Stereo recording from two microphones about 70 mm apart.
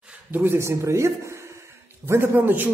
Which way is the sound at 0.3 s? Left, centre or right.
Right.